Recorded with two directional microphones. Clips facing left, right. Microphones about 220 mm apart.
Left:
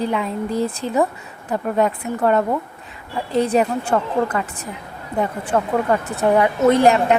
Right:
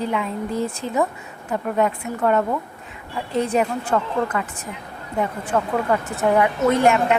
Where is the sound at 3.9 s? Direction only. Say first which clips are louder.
Left 2 dB; 40° left (ahead or behind).